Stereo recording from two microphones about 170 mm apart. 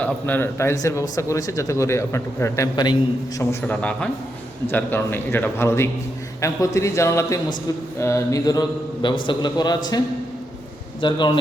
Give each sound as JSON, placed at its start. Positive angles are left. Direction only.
{"t": 0.0, "sound": "a man's voice", "side_deg": 10}
{"t": 3.7, "sound": "a man's voice", "side_deg": 10}
{"t": 11.0, "sound": "a man's voice", "side_deg": 25}